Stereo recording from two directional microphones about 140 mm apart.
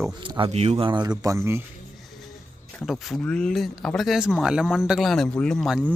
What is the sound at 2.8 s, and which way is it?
Speech, centre (ahead or behind).